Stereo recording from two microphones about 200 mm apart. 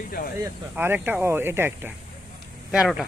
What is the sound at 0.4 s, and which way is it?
Speech, 10° right (ahead or behind).